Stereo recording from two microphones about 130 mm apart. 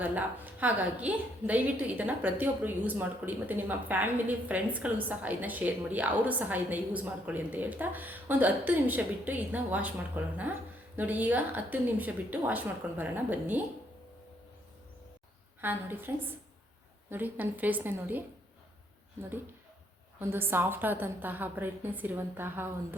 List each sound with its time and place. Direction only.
0.0 s a woman's voice: 10° right (ahead or behind)
15.6 s a woman's voice: 15° right (ahead or behind)